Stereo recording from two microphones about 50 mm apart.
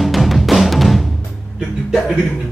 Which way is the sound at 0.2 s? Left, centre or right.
Centre.